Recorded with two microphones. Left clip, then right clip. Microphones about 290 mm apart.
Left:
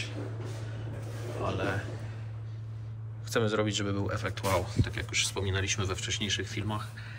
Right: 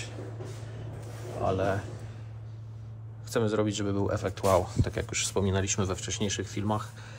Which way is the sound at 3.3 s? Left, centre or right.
Centre.